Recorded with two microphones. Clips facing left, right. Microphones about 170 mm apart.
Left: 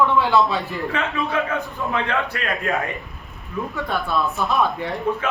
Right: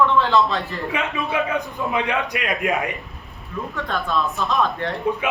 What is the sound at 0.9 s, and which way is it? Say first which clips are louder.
A man's voice: even; 15° right (ahead or behind).